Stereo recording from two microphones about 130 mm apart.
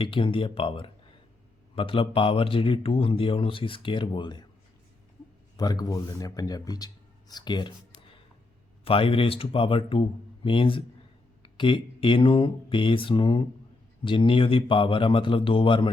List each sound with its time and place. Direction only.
0.0 s a man's voice: 40° left (ahead or behind)
5.5 s speech: 30° left (ahead or behind)
8.8 s a man's voice: 45° left (ahead or behind)